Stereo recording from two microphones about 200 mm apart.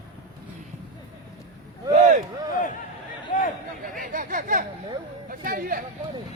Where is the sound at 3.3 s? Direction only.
40° left (ahead or behind).